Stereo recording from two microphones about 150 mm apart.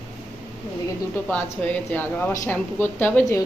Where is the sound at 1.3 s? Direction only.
10° left (ahead or behind).